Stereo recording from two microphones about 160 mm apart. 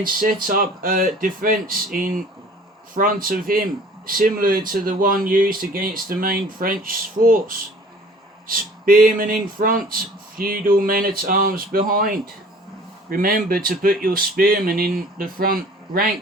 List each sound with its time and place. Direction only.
0.4 s speech: 60° right (ahead or behind)